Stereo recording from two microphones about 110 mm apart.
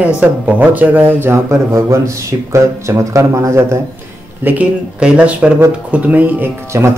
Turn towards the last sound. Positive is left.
turn(degrees=-25)  # may be behind; listen again after turning